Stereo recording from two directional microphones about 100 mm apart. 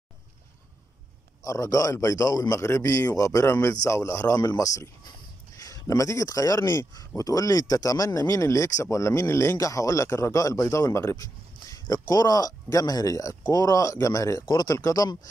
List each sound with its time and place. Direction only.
1.4 s speech: 35° left (ahead or behind)